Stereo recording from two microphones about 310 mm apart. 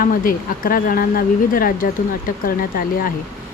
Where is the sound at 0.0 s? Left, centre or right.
Left.